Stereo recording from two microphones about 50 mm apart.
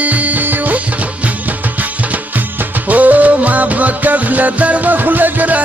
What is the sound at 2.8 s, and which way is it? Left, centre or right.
Music, right.